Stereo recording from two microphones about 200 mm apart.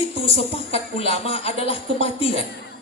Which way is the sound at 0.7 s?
30° left (ahead or behind).